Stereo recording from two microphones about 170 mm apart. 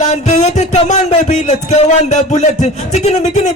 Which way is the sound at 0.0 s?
45° left (ahead or behind).